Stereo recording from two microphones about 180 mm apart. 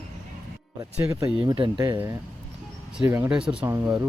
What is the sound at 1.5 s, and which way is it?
Speech, 25° right (ahead or behind).